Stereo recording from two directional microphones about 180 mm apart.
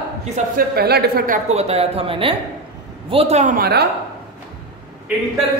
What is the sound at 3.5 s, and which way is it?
Speech, 60° right (ahead or behind).